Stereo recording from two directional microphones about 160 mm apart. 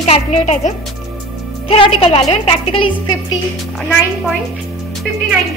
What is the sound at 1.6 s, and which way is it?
A woman's voice, 35° left (ahead or behind).